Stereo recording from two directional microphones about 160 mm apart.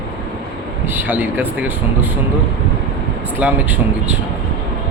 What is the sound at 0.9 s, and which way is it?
Speech, 10° right (ahead or behind).